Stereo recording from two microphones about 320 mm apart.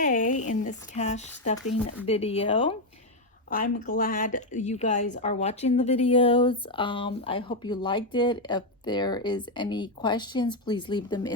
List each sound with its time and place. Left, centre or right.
0.0 s a woman's voice: left